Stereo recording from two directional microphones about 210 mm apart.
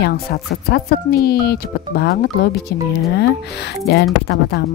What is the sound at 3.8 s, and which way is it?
Speech, 50° left (ahead or behind).